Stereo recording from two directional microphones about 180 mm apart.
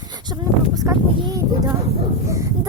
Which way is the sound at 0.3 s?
20° right (ahead or behind).